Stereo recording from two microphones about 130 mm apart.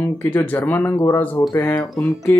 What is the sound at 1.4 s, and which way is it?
Speech, 30° left (ahead or behind).